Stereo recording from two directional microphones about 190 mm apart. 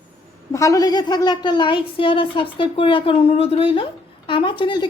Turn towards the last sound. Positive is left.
turn(degrees=25)  # may be behind; listen again after turning